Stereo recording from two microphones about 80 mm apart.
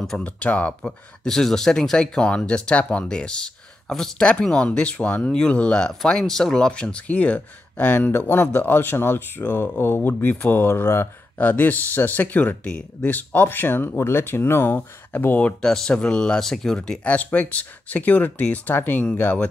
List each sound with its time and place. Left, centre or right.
0.2 s speech: centre
0.8 s speech: centre
15.6 s speech: centre